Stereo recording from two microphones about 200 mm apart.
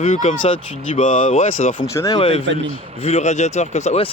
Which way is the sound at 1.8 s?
15° left (ahead or behind).